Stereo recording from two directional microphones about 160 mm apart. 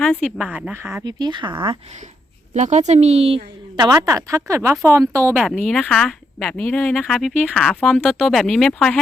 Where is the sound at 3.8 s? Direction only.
20° right (ahead or behind).